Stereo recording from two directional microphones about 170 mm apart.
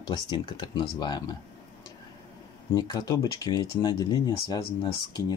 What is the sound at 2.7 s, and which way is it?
Speech, 20° left (ahead or behind).